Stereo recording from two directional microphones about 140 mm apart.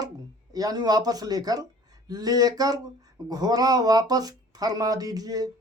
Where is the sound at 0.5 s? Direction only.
25° right (ahead or behind).